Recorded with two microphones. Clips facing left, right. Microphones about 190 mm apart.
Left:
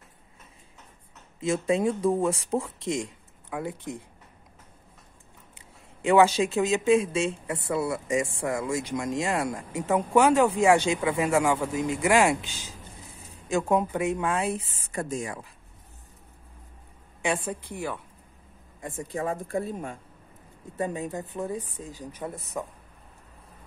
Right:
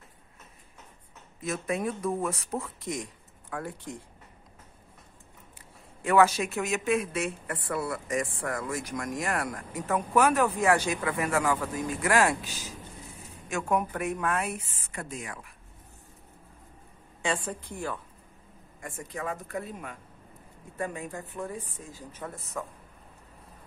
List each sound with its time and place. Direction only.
1.4 s speech: 25° left (ahead or behind)
6.0 s speech: 25° left (ahead or behind)
14.9 s speech: 40° left (ahead or behind)
17.2 s a woman's voice: 15° left (ahead or behind)
17.6 s a woman's voice: 70° left (ahead or behind)
18.8 s speech: 25° left (ahead or behind)